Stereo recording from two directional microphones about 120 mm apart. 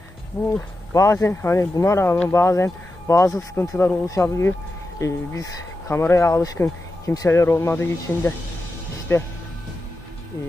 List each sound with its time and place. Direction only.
0.5 s speech: 25° left (ahead or behind)